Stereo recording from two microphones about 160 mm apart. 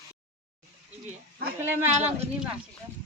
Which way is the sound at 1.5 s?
15° right (ahead or behind).